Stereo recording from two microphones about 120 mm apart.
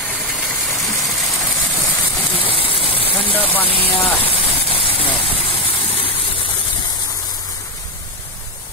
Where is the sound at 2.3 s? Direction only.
50° left (ahead or behind).